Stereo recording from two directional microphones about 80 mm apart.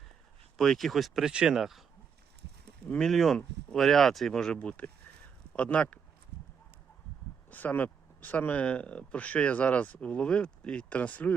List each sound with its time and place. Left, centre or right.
0.6 s speech: centre
2.9 s speech: centre
7.5 s speech: left